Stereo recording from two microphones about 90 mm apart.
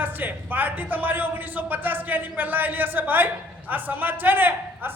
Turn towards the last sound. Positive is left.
turn(degrees=-20)  # may be behind; listen again after turning